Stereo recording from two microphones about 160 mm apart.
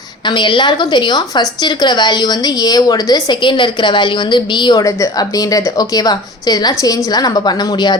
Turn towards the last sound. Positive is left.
turn(degrees=25)  # may be behind; listen again after turning